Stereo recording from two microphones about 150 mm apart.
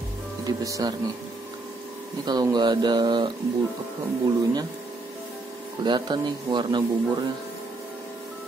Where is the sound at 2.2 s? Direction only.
25° right (ahead or behind).